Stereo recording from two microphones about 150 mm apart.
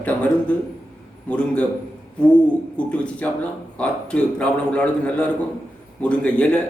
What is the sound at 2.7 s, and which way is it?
Speech, 10° left (ahead or behind).